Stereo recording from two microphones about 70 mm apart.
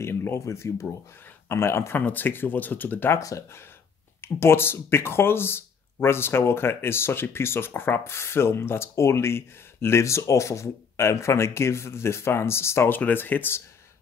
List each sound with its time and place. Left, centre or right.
0.0 s speech: left
2.0 s speech: left
3.2 s speech: left
4.2 s speech: left
13.0 s speech: left